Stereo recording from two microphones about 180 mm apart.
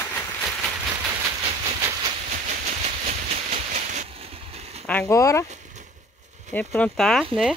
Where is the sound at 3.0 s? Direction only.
40° right (ahead or behind).